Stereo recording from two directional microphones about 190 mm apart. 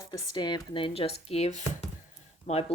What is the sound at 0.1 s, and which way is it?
A woman's voice, 25° left (ahead or behind).